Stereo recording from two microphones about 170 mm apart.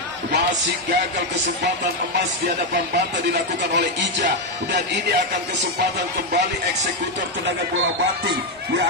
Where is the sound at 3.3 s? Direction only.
90° right.